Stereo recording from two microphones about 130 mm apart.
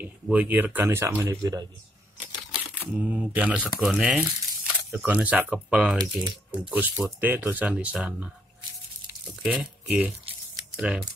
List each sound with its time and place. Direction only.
0.0 s speech: 10° right (ahead or behind); by 1.7 s 30° right (ahead or behind)
2.8 s speech: 10° right (ahead or behind)
9.4 s speech: 10° right (ahead or behind)